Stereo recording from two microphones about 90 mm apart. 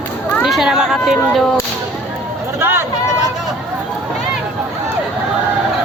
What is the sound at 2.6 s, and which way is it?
Speech, 30° right (ahead or behind).